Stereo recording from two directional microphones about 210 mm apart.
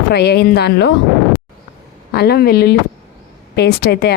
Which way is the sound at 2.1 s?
50° left (ahead or behind).